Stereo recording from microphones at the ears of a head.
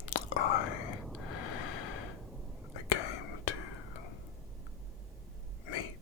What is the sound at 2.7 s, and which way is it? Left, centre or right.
Whispering, left.